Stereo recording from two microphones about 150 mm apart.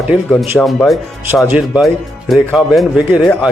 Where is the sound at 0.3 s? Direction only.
Centre (ahead or behind).